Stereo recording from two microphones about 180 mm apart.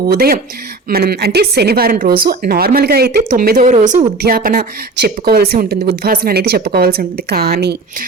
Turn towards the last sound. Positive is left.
turn(degrees=-65)  # may be behind; listen again after turning